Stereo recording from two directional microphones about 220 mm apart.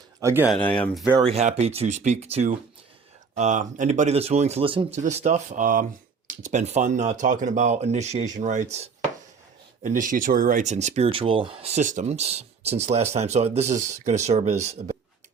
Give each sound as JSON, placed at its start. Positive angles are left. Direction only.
{"t": 0.2, "sound": "speech", "side_deg": -10}
{"t": 0.5, "sound": "speech", "side_deg": 5}
{"t": 1.2, "sound": "speech", "side_deg": -30}
{"t": 9.8, "sound": "speech", "side_deg": -35}